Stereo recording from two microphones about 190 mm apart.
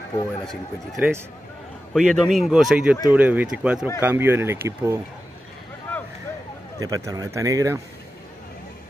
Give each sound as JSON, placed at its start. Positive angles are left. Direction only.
{"t": 0.5, "sound": "speech", "side_deg": 0}
{"t": 5.9, "sound": "vehicle", "side_deg": 10}
{"t": 6.8, "sound": "speech", "side_deg": -20}